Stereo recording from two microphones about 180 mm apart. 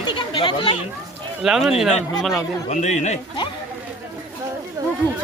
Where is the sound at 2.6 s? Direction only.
40° left (ahead or behind).